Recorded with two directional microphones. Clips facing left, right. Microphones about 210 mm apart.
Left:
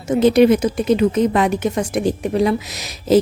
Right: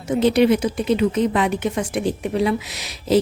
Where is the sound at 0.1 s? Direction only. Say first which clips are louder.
Left 4 dB; 45° left (ahead or behind).